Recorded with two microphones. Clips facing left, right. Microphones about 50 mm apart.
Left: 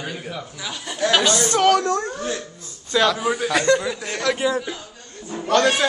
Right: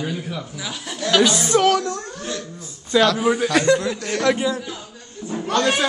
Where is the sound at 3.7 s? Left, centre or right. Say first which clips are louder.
Right 2 dB; centre.